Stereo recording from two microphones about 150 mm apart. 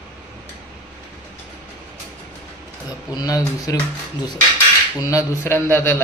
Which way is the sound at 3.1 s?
25° left (ahead or behind).